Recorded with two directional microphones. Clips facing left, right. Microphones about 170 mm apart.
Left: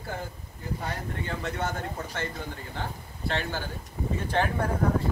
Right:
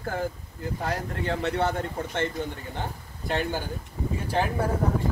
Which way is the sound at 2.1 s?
20° right (ahead or behind).